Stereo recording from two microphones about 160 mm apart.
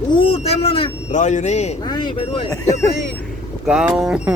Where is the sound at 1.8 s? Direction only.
25° left (ahead or behind).